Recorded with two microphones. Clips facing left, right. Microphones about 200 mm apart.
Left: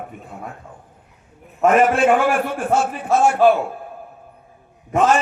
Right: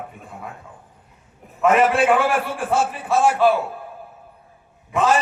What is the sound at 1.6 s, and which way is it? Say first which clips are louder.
A man's voice: left 2 dB; 45° left (ahead or behind).